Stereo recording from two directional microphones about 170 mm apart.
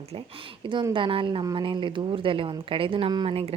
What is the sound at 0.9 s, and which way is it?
Speech, 30° right (ahead or behind).